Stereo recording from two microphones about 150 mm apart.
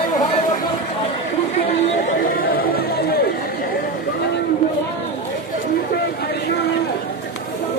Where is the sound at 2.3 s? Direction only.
80° left.